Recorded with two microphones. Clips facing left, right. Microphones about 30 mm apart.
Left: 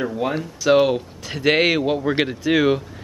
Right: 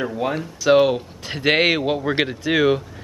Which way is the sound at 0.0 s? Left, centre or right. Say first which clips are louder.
Even; centre.